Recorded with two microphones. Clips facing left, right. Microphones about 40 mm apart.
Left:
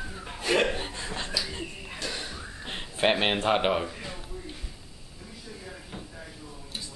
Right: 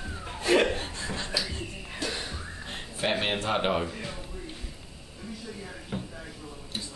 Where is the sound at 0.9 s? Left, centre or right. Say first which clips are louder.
Even; left.